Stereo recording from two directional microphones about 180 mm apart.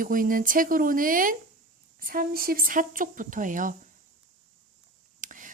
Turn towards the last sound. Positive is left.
turn(degrees=-45)  # may be behind; listen again after turning